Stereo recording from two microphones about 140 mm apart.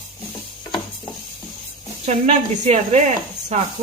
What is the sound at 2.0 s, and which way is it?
Speech, 50° right (ahead or behind).